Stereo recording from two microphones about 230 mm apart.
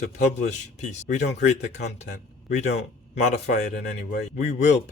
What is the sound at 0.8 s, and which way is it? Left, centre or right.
A man's voice, left.